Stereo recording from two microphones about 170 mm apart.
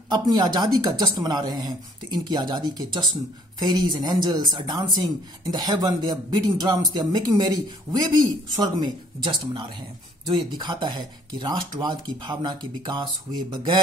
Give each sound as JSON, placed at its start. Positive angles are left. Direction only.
{"t": 0.1, "sound": "speech", "side_deg": -25}